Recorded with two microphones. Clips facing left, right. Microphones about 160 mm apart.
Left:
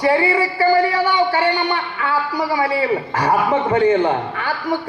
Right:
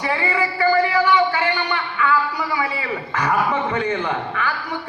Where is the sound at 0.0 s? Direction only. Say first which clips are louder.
Left 6 dB; 35° left (ahead or behind).